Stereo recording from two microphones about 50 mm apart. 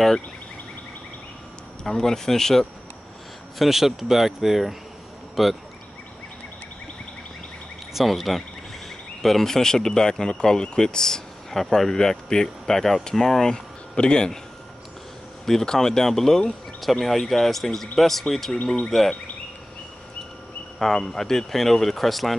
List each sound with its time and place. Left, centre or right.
1.9 s speech: centre
3.5 s speech: centre
7.9 s speech: centre
15.4 s speech: centre
20.8 s speech: centre